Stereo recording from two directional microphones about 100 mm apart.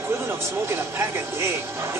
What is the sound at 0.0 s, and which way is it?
Speech, 25° right (ahead or behind).